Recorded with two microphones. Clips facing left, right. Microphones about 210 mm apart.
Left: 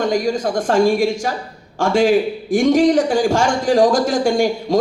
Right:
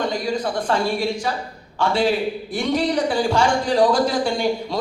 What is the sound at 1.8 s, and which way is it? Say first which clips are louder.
Speech: left 5 dB; 45° left (ahead or behind).